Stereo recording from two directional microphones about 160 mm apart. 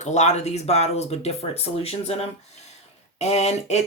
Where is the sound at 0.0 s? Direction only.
45° left (ahead or behind).